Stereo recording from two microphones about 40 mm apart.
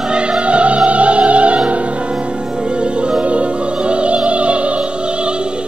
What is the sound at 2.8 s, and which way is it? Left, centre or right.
Opera, right.